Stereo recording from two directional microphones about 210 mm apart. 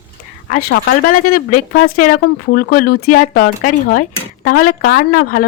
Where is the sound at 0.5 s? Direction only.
40° left (ahead or behind).